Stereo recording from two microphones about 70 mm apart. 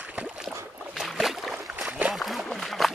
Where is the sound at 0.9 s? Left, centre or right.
Centre.